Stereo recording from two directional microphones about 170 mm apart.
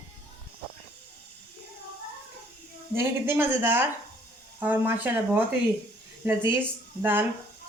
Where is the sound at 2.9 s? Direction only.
15° right (ahead or behind).